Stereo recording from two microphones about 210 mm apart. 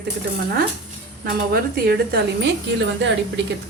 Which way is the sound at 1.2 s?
45° right (ahead or behind).